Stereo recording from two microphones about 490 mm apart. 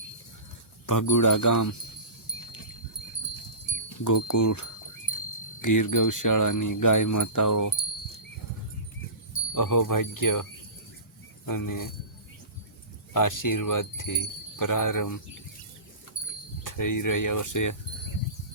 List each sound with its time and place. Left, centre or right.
0.9 s speech: left
4.0 s speech: left
5.6 s speech: left
9.6 s speech: left
11.4 s speech: left
13.1 s speech: left
16.6 s speech: left